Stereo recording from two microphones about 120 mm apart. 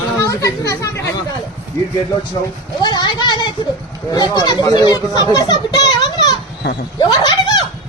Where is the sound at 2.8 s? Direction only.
35° left (ahead or behind).